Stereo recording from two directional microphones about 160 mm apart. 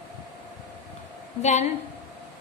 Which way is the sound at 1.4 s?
45° left (ahead or behind).